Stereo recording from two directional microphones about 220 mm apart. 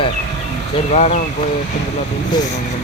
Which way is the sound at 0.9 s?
30° left (ahead or behind).